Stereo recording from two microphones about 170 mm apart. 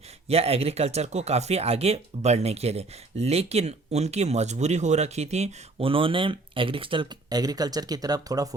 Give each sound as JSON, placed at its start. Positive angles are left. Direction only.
{"t": 0.3, "sound": "speech", "side_deg": -35}